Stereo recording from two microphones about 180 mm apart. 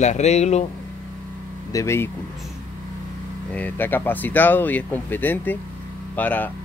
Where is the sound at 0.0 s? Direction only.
40° left (ahead or behind).